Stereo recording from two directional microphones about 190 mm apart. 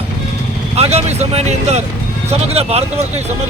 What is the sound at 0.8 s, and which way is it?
Speech, 35° right (ahead or behind).